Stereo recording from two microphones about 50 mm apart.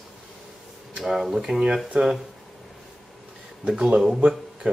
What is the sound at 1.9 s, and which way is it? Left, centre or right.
Speech, right.